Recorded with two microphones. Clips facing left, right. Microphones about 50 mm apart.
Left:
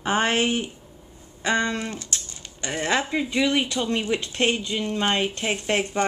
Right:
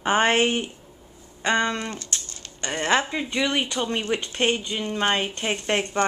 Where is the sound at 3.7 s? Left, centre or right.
Centre.